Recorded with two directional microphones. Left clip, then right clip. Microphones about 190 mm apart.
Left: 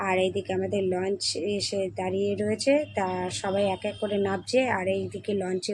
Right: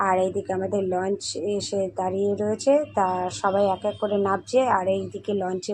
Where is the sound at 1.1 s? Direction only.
Centre (ahead or behind).